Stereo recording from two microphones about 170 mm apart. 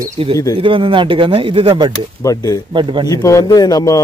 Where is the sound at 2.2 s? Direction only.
20° left (ahead or behind).